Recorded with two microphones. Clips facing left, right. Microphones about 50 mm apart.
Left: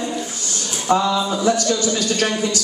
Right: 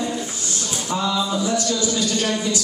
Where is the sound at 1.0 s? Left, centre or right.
Centre.